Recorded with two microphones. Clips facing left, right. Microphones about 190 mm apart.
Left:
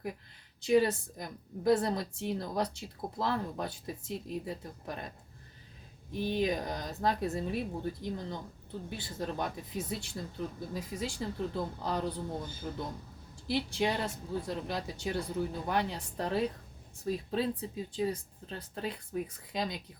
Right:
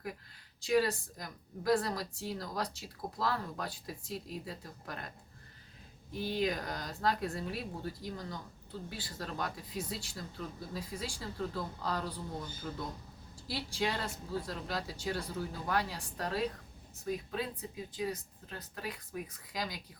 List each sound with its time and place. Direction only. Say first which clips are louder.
0.6 s a woman's voice: left 4 dB; 25° left (ahead or behind)
6.1 s a woman's voice: left 3 dB; 20° left (ahead or behind)